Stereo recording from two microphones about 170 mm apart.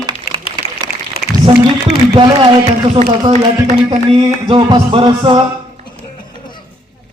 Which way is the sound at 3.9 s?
30° right (ahead or behind).